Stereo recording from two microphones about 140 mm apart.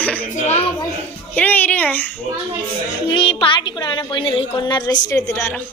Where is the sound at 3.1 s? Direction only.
40° left (ahead or behind); by 5.6 s 20° left (ahead or behind).